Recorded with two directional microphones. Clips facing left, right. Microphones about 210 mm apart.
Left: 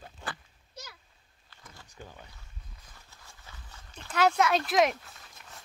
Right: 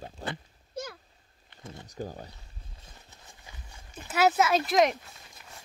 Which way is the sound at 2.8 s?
20° right (ahead or behind).